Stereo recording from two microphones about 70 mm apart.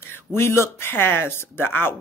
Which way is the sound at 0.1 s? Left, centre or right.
Left.